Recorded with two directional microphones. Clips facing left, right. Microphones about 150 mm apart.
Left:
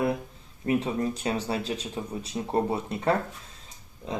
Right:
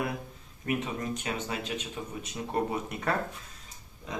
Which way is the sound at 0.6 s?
30° left (ahead or behind).